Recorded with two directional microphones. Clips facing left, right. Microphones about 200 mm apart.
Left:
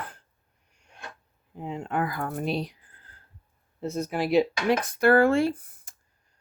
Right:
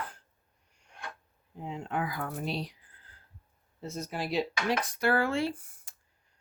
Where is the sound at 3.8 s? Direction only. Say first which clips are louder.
Left 8 dB; 60° left (ahead or behind).